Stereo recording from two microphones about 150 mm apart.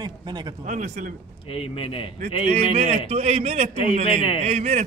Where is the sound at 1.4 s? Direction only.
40° left (ahead or behind).